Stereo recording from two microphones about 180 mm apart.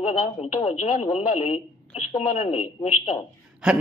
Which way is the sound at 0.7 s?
40° left (ahead or behind).